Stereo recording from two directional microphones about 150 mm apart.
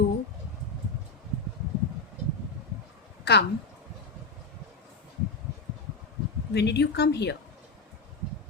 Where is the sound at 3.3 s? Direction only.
90° left.